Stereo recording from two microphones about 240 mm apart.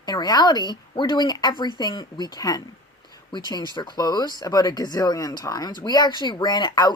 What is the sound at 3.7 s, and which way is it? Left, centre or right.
Speech, centre.